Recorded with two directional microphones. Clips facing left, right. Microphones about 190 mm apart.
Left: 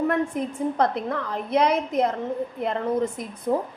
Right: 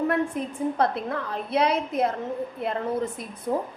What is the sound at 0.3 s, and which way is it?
A woman's voice, 15° left (ahead or behind).